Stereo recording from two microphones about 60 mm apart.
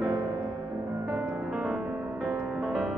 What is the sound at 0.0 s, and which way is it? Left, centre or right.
Music, right.